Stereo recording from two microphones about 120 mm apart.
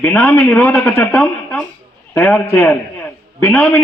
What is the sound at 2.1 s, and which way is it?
Speech, 10° left (ahead or behind).